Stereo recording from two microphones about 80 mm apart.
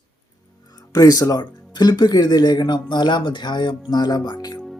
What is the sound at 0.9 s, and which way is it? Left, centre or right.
Speech, left.